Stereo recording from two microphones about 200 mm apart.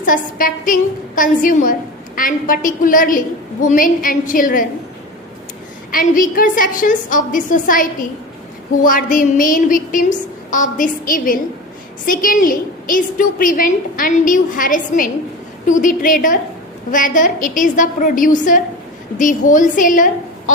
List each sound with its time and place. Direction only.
0.0 s a woman's voice: 45° left (ahead or behind)
5.9 s a woman's voice: 45° left (ahead or behind)